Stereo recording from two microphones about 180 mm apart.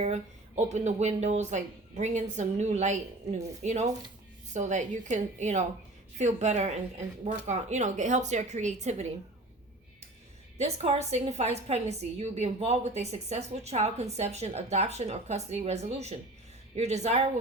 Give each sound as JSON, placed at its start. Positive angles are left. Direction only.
{"t": 0.0, "sound": "a woman's voice", "side_deg": -40}
{"t": 10.6, "sound": "a woman's voice", "side_deg": -35}